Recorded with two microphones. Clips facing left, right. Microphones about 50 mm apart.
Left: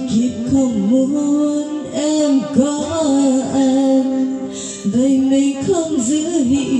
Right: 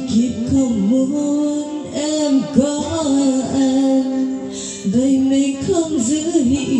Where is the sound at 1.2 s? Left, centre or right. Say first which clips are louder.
Left 2 dB; left.